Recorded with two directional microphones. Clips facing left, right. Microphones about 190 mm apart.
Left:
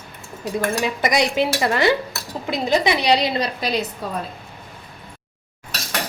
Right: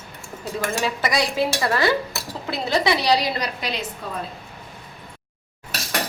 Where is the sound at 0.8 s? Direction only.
20° left (ahead or behind); by 3.8 s 35° left (ahead or behind).